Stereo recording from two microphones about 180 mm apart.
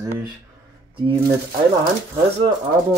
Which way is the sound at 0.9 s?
30° right (ahead or behind).